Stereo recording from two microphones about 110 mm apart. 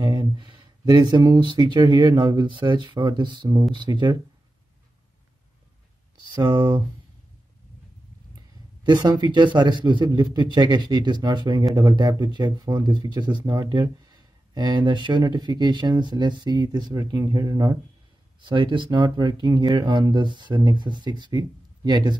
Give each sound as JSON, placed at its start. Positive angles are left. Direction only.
{"t": 0.0, "sound": "speech", "side_deg": -40}
{"t": 6.3, "sound": "speech", "side_deg": -45}
{"t": 8.8, "sound": "speech", "side_deg": -40}
{"t": 18.4, "sound": "speech", "side_deg": -45}